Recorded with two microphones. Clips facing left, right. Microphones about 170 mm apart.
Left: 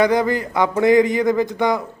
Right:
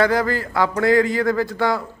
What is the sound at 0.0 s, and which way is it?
A man's voice, 20° left (ahead or behind).